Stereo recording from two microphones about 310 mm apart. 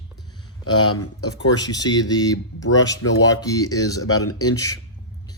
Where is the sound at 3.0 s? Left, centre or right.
Left.